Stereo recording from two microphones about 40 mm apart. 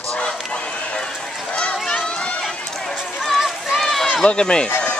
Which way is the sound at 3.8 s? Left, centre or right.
Centre.